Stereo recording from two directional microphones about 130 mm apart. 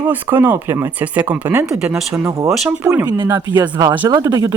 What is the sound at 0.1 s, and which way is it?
Speech, 15° right (ahead or behind).